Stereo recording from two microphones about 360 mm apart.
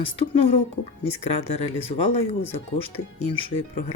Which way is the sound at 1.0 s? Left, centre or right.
Centre.